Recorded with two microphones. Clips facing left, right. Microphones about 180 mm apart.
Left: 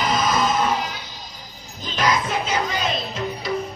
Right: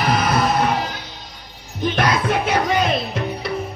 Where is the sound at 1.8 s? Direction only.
60° right (ahead or behind).